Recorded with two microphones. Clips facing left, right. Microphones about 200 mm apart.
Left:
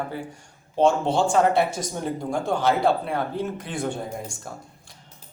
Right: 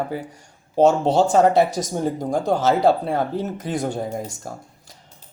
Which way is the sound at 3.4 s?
40° right (ahead or behind).